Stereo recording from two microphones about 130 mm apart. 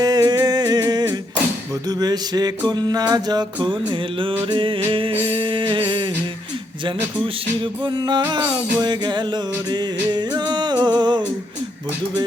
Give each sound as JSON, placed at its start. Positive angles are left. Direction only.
{"t": 0.0, "sound": "humming", "side_deg": -30}
{"t": 1.9, "sound": "music", "side_deg": -30}
{"t": 7.2, "sound": "music", "side_deg": -40}